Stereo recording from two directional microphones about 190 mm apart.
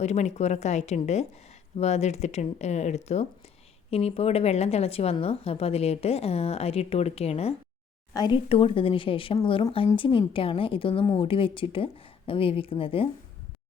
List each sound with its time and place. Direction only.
0.0 s a woman's voice: 35° left (ahead or behind)